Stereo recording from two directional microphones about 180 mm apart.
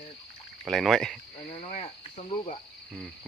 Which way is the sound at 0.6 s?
Centre (ahead or behind).